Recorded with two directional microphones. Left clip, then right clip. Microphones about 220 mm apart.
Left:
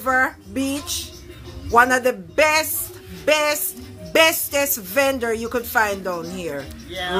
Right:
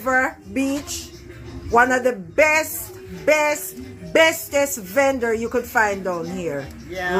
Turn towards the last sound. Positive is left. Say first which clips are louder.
# right 2 dB
turn(degrees=0)  # may be behind; listen again after turning